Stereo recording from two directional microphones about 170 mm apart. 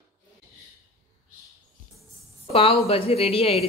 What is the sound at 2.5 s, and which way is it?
Speech, 35° left (ahead or behind).